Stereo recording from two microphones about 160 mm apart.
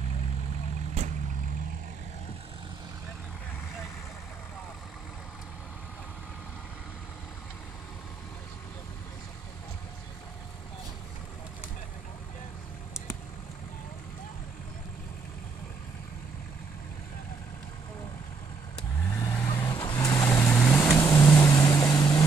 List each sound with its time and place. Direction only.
19.2 s vehicle: 20° left (ahead or behind)
20.5 s vehicle: 10° left (ahead or behind)